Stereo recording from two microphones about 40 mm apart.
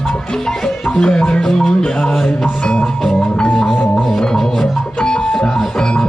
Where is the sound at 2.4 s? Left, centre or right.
Left.